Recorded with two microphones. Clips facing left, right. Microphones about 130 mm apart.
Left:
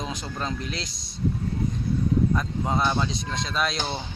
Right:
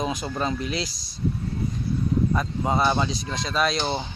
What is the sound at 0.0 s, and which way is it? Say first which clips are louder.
Speech: right 5 dB; 10° right (ahead or behind).